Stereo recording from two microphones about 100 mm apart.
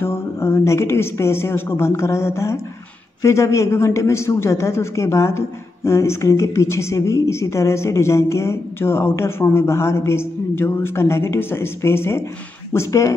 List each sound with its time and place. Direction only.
0.0 s speech: 25° left (ahead or behind)